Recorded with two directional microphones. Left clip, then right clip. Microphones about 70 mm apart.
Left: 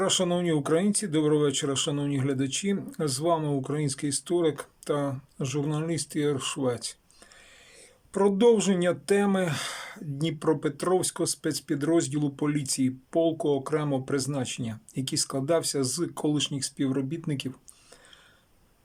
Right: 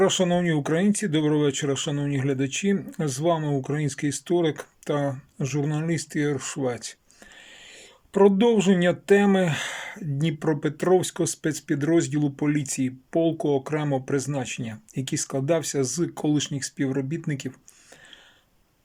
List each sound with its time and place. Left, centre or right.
0.0 s speech: centre
8.1 s speech: centre